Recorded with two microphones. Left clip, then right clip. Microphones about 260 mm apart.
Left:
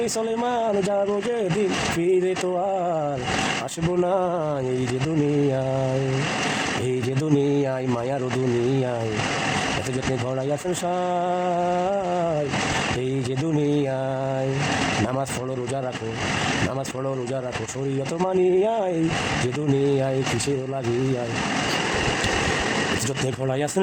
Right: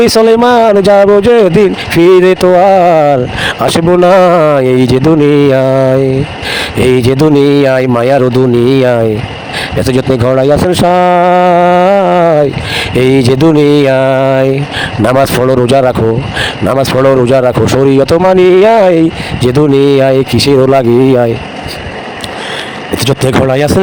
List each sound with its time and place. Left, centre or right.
0.0 s speech: right
6.8 s speech: right
23.0 s speech: right